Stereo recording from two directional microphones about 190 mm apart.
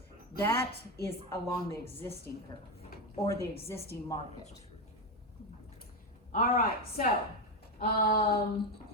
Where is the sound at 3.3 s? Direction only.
15° left (ahead or behind).